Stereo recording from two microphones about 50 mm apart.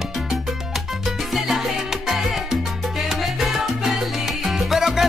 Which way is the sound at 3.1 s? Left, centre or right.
Centre.